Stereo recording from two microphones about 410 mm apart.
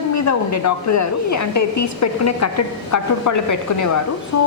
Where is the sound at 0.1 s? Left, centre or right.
Left.